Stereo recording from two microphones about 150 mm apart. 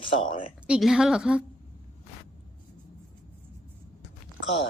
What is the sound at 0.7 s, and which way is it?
Speech, centre (ahead or behind).